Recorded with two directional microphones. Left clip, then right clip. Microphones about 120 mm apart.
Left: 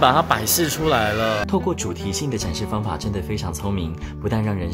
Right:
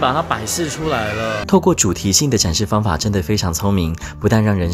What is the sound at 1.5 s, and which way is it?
Speech, 45° right (ahead or behind).